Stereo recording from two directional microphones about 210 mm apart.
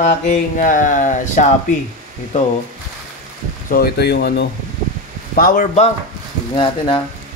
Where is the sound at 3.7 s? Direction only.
50° left (ahead or behind).